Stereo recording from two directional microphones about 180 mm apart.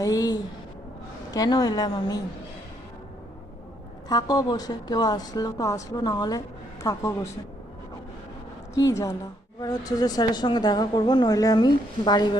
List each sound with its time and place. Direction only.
0.0 s speech: 20° left (ahead or behind)
4.1 s speech: 20° left (ahead or behind)
8.7 s a woman's voice: 20° left (ahead or behind)